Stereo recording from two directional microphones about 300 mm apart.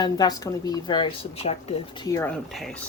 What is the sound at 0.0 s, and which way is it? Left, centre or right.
A woman's voice, centre.